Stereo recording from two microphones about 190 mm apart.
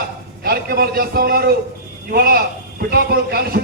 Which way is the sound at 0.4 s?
55° right (ahead or behind).